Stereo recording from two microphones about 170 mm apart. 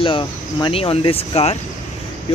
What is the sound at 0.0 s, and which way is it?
Speech, 30° left (ahead or behind).